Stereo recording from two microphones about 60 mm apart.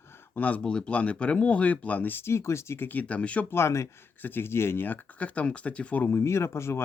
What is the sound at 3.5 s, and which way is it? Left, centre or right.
Speech, left.